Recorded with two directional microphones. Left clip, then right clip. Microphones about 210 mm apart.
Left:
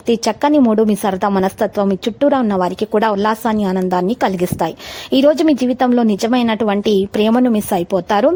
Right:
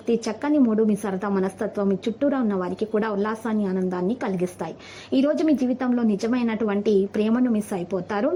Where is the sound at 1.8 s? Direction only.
50° left (ahead or behind).